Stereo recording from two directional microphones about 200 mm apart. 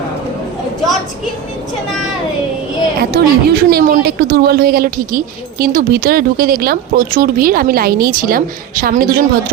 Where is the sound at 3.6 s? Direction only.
45° right (ahead or behind).